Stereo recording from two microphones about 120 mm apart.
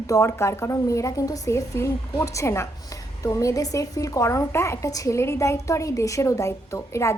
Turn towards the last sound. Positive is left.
turn(degrees=25)  # may be behind; listen again after turning